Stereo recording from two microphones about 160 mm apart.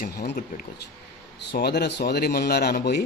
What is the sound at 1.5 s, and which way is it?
Speech, 90° left.